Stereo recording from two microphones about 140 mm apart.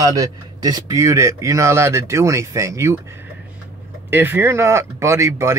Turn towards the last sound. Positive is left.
turn(degrees=-20)  # may be behind; listen again after turning